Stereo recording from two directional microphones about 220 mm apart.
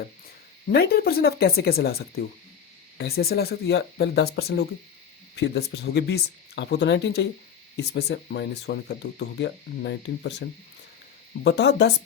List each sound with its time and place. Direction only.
0.7 s speech: 45° left (ahead or behind)
11.4 s speech: 50° left (ahead or behind)